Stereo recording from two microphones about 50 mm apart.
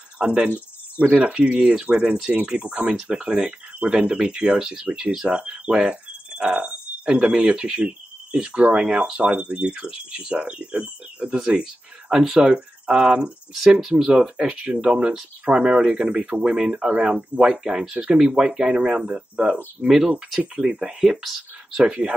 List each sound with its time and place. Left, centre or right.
0.2 s speech: centre
0.9 s speech: right
5.8 s cricket: right
7.2 s speech: centre
12.1 s speech: centre
15.5 s speech: centre
18.8 s speech: right
19.9 s speech: centre
21.8 s speech: centre